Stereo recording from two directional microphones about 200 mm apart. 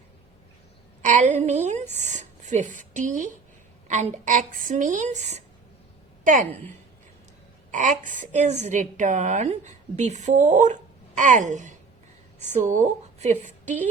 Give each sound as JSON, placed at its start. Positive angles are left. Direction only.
{"t": 1.0, "sound": "a woman's voice", "side_deg": -40}
{"t": 7.7, "sound": "a woman's voice", "side_deg": -40}